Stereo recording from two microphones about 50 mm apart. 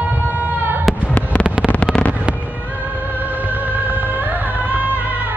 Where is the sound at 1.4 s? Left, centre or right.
Right.